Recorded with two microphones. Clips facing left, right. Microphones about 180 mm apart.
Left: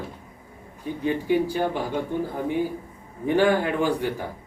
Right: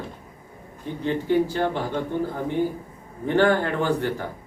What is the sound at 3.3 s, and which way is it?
Speech, 10° left (ahead or behind).